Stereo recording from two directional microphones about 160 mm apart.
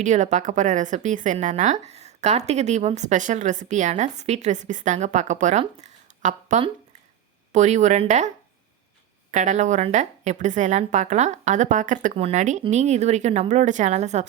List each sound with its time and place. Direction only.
0.0 s a woman's voice: 50° right (ahead or behind)
9.3 s a woman's voice: 50° right (ahead or behind)
12.1 s a woman's voice: 40° right (ahead or behind)